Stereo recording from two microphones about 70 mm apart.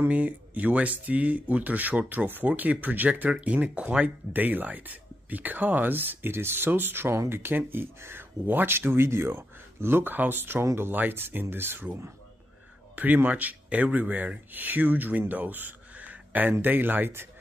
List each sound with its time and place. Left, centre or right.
0.1 s speech: right
10.9 s speech: right